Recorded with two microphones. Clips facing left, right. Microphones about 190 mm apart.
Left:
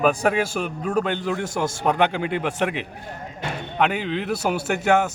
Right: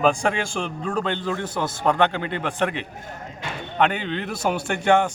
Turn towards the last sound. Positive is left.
turn(degrees=5)  # may be behind; listen again after turning